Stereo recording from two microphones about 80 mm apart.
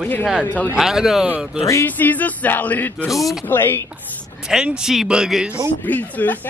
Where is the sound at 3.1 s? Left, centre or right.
Centre.